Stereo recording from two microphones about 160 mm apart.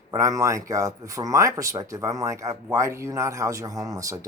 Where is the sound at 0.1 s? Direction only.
20° right (ahead or behind).